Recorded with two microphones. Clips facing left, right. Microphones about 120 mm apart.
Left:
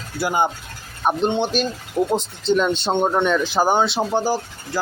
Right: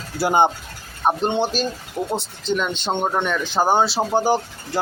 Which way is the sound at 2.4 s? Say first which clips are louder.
Left 5 dB; 35° left (ahead or behind).